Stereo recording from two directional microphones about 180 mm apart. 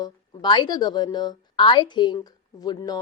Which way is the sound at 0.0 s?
25° left (ahead or behind).